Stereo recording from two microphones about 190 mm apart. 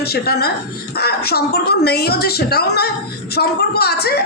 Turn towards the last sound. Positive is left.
turn(degrees=55)  # may be behind; listen again after turning